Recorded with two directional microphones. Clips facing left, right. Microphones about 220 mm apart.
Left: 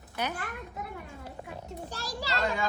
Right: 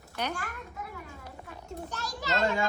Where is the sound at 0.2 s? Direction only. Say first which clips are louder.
Even; 10° left (ahead or behind).